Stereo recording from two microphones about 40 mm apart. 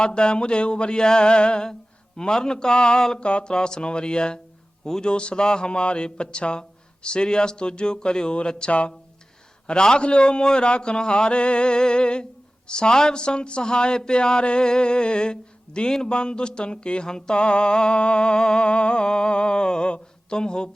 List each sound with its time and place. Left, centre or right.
0.0 s a man's voice: left